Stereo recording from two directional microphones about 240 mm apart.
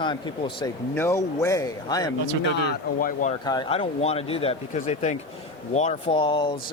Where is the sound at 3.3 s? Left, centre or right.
Centre.